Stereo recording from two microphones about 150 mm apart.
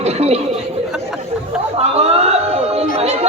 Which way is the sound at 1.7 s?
45° right (ahead or behind).